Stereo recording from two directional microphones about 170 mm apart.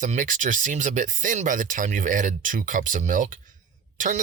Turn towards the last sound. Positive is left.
turn(degrees=-50)  # may be behind; listen again after turning